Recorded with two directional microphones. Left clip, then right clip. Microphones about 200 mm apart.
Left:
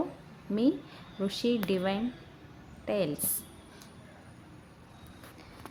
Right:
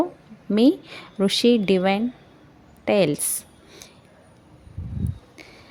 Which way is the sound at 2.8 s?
45° right (ahead or behind).